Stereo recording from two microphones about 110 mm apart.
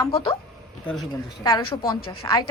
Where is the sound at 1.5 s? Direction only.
45° left (ahead or behind).